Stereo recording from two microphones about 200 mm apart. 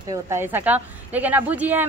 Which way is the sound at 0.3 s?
10° right (ahead or behind).